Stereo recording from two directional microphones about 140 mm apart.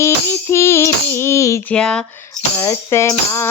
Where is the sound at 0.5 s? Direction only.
20° left (ahead or behind).